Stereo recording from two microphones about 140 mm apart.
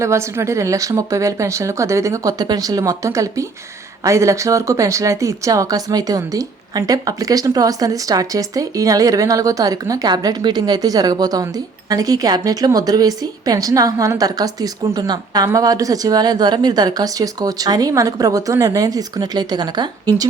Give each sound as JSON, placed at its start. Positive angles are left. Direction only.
{"t": 0.0, "sound": "speech", "side_deg": -20}